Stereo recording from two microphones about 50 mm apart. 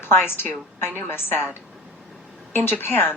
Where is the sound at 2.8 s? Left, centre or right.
Left.